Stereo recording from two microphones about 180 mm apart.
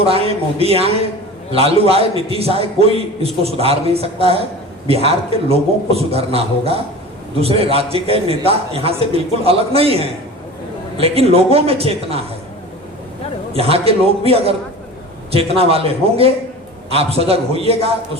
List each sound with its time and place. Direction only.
0.0 s a man's voice: 35° right (ahead or behind)
13.5 s a man's voice: 35° right (ahead or behind)